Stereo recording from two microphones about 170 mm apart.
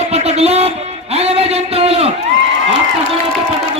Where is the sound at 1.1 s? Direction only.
35° right (ahead or behind).